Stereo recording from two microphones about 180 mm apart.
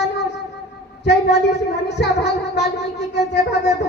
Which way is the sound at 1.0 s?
70° left (ahead or behind).